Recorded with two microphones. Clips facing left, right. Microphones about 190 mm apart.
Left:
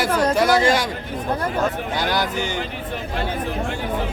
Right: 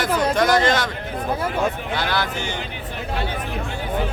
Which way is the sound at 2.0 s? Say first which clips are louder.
Left 2 dB; 15° left (ahead or behind).